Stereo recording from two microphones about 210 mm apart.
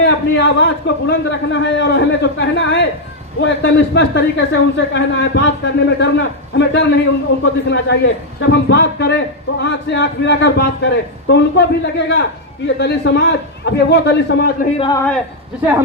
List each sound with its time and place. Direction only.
0.0 s a man's voice: 60° left (ahead or behind)
14.8 s a man's voice: 20° left (ahead or behind)